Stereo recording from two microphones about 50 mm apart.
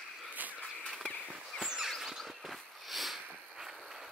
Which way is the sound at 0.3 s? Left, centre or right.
Right.